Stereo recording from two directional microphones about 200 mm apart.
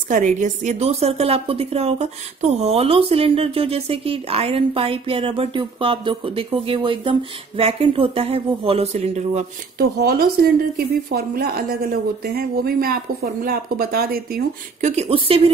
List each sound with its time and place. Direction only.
0.1 s a woman's voice: 40° right (ahead or behind)
9.8 s a woman's voice: 50° right (ahead or behind); by 15.5 s 30° right (ahead or behind)